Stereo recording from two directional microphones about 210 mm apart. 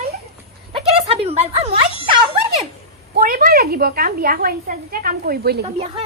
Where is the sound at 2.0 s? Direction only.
30° right (ahead or behind).